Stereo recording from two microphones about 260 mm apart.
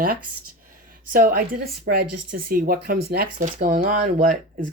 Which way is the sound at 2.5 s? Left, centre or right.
Right.